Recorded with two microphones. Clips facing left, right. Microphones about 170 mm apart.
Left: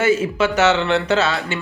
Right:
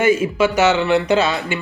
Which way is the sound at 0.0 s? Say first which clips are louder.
Right 2 dB; 10° right (ahead or behind).